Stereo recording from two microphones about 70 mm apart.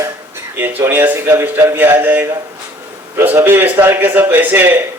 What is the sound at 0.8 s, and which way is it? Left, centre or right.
A man's voice, right.